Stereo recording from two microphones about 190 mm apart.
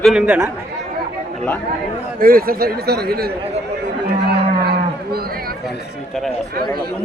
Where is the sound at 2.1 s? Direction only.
50° right (ahead or behind).